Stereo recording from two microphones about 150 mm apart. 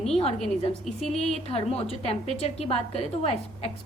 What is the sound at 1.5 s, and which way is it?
A woman's voice, 40° left (ahead or behind).